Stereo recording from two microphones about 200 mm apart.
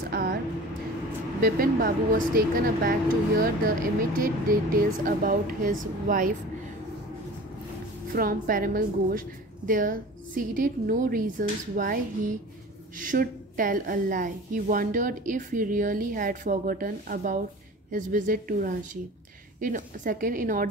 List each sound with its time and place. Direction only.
0.1 s vehicle: 50° right (ahead or behind)
1.4 s a woman's voice: 45° right (ahead or behind)
8.1 s a woman's voice: 45° right (ahead or behind)